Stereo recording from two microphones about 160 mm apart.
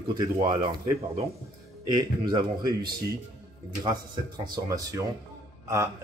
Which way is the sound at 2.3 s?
25° right (ahead or behind).